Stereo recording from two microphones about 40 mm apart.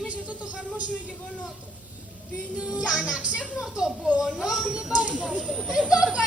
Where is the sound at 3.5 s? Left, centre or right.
Centre.